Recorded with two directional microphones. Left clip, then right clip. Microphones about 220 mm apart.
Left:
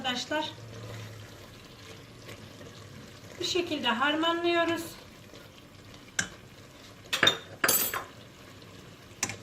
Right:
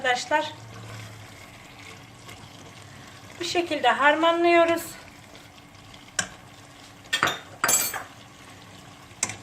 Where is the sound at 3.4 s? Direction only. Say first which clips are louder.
Right 6 dB; 45° right (ahead or behind).